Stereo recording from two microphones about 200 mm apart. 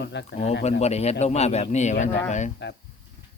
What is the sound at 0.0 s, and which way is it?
Speech, 60° left (ahead or behind).